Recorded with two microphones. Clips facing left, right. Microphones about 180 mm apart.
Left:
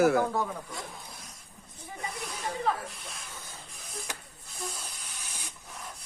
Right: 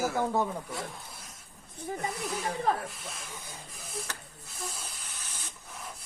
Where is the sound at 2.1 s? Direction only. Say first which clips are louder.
Right 4 dB; centre (ahead or behind).